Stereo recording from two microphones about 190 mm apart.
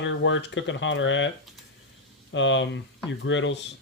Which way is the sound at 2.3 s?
80° left.